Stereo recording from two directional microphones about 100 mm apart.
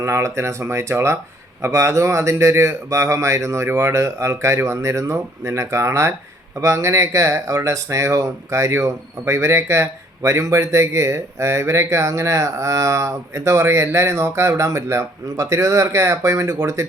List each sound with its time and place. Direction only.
0.0 s speech: 30° right (ahead or behind)